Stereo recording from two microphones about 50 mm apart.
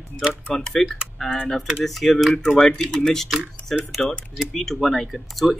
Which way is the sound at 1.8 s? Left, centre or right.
Centre.